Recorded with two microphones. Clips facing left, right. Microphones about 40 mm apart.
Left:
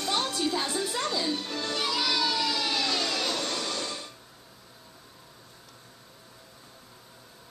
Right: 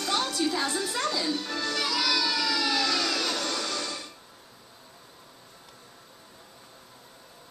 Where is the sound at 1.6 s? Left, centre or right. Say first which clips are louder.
Right 1 dB; left.